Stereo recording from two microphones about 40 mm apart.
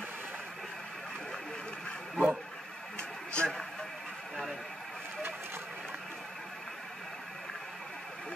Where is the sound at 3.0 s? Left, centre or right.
Left.